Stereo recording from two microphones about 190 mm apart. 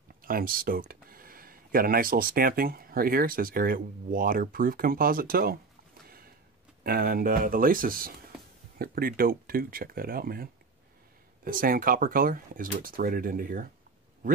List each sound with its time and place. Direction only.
0.2 s speech: 50° right (ahead or behind)
6.8 s speech: 50° right (ahead or behind)